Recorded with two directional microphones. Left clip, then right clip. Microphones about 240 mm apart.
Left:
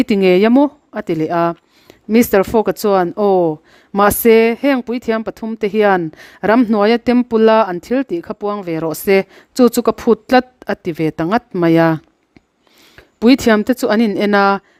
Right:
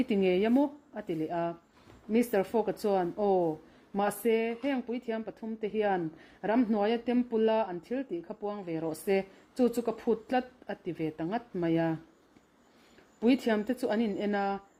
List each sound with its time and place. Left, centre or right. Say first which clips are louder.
0.0 s speech: left 16 dB; left
13.1 s speech: left 16 dB; left